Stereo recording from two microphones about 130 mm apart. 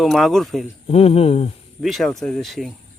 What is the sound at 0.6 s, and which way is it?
Speech, 50° left (ahead or behind).